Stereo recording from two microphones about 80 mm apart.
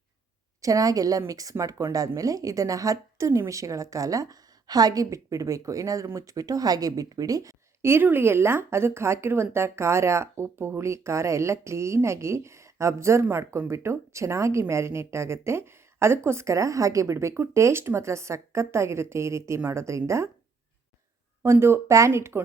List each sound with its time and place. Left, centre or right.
0.6 s a woman's voice: right
7.8 s a woman's voice: right
21.4 s a woman's voice: right